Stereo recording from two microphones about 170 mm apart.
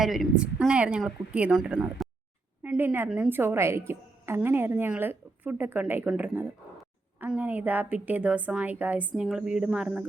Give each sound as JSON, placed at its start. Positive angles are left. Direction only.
{"t": 0.0, "sound": "a woman's voice", "side_deg": 0}